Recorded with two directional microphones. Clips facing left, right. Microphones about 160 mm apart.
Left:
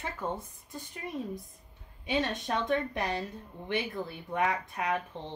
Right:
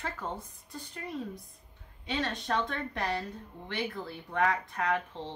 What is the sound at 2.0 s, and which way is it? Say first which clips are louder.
Speech: left 2 dB; 15° left (ahead or behind).